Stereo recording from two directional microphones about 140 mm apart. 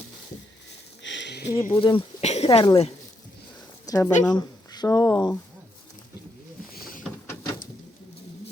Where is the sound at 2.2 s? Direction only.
50° left (ahead or behind).